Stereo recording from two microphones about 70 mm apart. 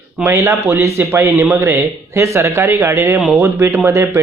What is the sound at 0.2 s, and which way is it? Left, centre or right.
Speech, right.